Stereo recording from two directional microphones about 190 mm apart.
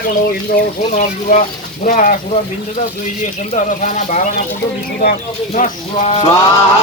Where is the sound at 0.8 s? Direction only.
40° left (ahead or behind).